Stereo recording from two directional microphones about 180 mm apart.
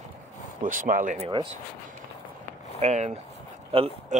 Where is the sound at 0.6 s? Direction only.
50° right (ahead or behind).